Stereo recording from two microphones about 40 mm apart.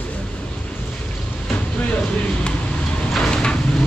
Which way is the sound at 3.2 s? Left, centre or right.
Left.